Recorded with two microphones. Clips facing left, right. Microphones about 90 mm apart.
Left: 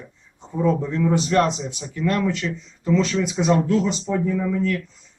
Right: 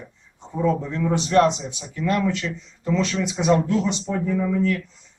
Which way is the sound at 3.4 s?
5° right (ahead or behind).